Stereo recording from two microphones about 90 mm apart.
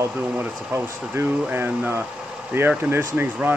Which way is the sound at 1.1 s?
25° right (ahead or behind).